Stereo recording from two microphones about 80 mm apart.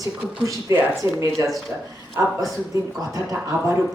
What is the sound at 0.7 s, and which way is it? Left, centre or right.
Speech, right.